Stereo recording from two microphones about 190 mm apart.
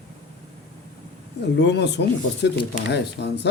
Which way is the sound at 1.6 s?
65° left (ahead or behind).